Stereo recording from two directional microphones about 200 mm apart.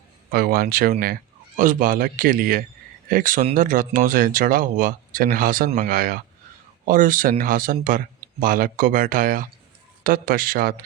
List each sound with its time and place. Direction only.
0.3 s speech: 50° right (ahead or behind)